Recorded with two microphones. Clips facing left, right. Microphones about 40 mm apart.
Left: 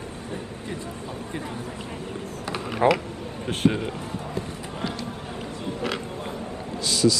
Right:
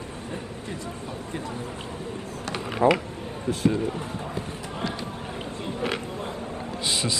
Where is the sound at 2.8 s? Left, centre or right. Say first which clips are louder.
Even; left.